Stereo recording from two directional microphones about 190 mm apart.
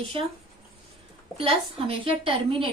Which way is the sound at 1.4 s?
30° right (ahead or behind).